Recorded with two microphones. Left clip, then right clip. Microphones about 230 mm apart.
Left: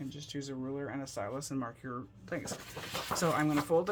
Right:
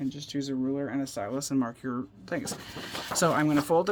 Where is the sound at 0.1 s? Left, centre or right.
Right.